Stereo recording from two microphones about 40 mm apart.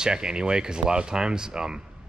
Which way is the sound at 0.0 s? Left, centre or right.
Centre.